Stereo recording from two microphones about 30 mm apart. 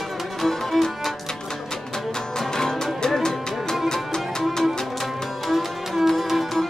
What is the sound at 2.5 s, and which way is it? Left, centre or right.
Music, centre.